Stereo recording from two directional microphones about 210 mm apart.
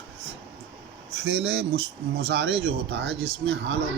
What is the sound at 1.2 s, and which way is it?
Speech, 55° right (ahead or behind).